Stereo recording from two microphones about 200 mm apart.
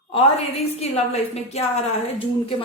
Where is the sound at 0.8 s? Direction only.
30° left (ahead or behind).